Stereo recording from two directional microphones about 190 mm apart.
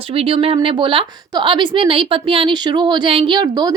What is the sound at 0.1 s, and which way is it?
A woman's voice, 30° right (ahead or behind).